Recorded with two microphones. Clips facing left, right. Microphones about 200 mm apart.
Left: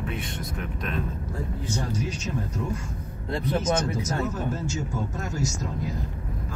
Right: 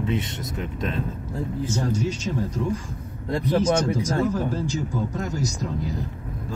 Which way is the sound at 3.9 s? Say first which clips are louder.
Right 5 dB; 15° right (ahead or behind).